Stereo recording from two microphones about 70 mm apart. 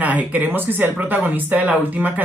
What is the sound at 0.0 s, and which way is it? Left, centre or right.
Speech, right.